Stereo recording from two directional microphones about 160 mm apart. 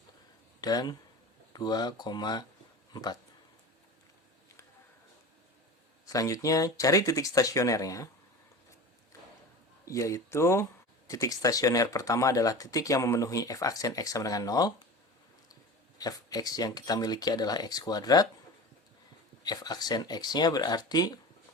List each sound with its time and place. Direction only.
0.6 s speech: 25° left (ahead or behind)
6.1 s speech: 20° left (ahead or behind)
9.8 s speech: 20° left (ahead or behind)
16.0 s speech: 25° left (ahead or behind)
19.4 s speech: 25° left (ahead or behind)